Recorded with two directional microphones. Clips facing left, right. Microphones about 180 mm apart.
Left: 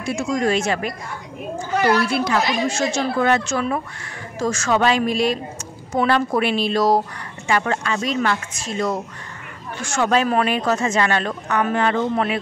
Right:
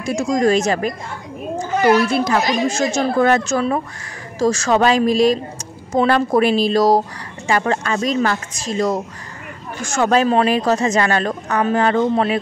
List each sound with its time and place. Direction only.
0.0 s speech: 40° right (ahead or behind)
2.0 s speech: 40° right (ahead or behind)